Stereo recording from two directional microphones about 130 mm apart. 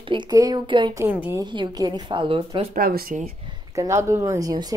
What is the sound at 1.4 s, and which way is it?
Speech, 35° right (ahead or behind).